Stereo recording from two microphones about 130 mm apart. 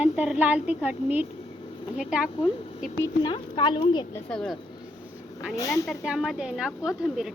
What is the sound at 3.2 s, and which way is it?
Speech, 40° left (ahead or behind).